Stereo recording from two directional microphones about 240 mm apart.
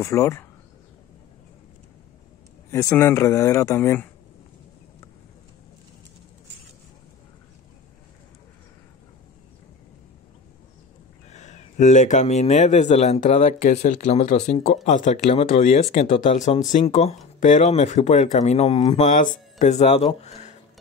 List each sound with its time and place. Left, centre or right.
0.0 s speech: centre
2.7 s speech: centre
11.2 s speech: left